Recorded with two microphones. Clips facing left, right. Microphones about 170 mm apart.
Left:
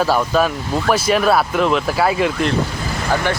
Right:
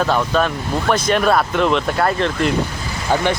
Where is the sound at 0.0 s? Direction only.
5° left (ahead or behind).